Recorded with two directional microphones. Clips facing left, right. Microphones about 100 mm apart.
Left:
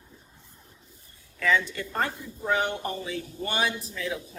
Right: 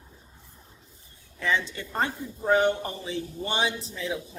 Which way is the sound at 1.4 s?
25° right (ahead or behind).